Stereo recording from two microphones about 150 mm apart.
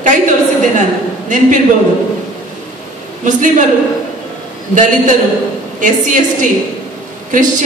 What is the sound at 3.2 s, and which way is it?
Speech, 55° right (ahead or behind).